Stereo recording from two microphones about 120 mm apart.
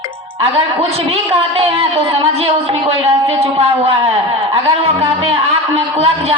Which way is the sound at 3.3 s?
55° right (ahead or behind).